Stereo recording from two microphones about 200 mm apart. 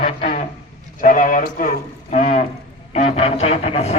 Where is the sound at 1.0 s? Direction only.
40° left (ahead or behind).